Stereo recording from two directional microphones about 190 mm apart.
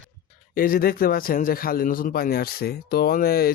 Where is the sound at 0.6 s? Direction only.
50° left (ahead or behind).